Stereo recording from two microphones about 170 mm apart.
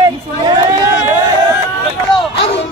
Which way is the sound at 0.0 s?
25° right (ahead or behind).